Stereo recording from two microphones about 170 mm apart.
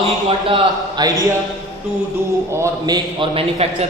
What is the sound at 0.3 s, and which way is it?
A man's voice, 30° right (ahead or behind).